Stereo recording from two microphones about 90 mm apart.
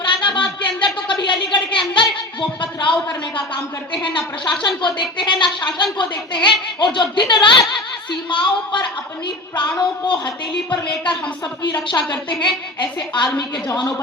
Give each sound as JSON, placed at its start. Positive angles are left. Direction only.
{"t": 0.0, "sound": "a sound", "side_deg": 65}
{"t": 4.8, "sound": "a woman's voice", "side_deg": 60}
{"t": 10.1, "sound": "a woman's voice", "side_deg": 60}